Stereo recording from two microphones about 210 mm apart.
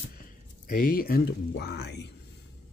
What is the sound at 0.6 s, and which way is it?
Speech, 40° left (ahead or behind).